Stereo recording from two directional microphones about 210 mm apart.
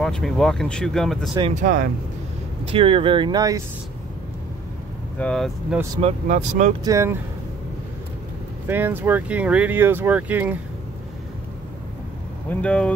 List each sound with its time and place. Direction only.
0.0 s speech: centre (ahead or behind)
1.3 s speech: 25° right (ahead or behind)
1.6 s speech: 40° right (ahead or behind)
2.7 s speech: 25° right (ahead or behind)
5.2 s speech: centre (ahead or behind)
5.9 s speech: 35° right (ahead or behind)
6.8 s speech: 15° right (ahead or behind)
8.6 s speech: 10° right (ahead or behind)
12.4 s speech: 5° left (ahead or behind)